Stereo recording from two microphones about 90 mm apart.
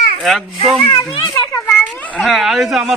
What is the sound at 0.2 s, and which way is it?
Speech, centre (ahead or behind).